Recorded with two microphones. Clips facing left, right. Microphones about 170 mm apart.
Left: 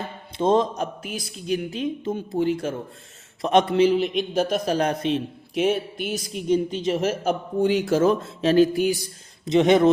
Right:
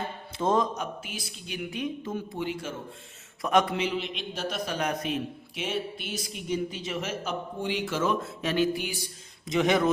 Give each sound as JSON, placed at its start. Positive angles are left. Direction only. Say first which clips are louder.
{"t": 0.3, "sound": "a woman's voice", "louder": "left 6 dB", "side_deg": 25}
{"t": 1.0, "sound": "speech", "louder": "left 10 dB", "side_deg": 45}
{"t": 1.7, "sound": "a woman's voice", "louder": "left 5 dB", "side_deg": 25}
{"t": 2.4, "sound": "a man's voice", "louder": "left 12 dB", "side_deg": 40}
{"t": 3.4, "sound": "a woman's voice", "louder": "left 5 dB", "side_deg": 25}
{"t": 3.8, "sound": "a man's voice", "louder": "left 12 dB", "side_deg": 40}
{"t": 5.5, "sound": "a man's voice", "louder": "left 10 dB", "side_deg": 45}
{"t": 9.5, "sound": "a woman's voice", "louder": "left 7 dB", "side_deg": 25}